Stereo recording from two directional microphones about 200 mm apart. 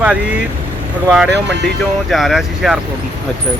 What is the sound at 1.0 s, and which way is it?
Speech, 5° right (ahead or behind).